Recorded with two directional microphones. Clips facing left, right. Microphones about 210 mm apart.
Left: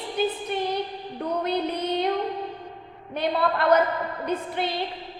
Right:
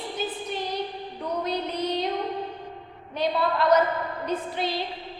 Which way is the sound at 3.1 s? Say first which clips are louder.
Left 1 dB; 55° left (ahead or behind).